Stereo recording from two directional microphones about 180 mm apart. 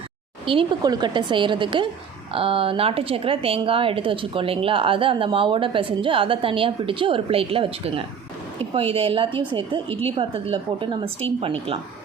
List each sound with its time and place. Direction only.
0.4 s a woman's voice: 30° right (ahead or behind)